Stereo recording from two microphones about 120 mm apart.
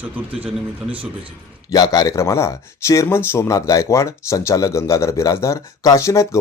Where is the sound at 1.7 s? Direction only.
35° left (ahead or behind).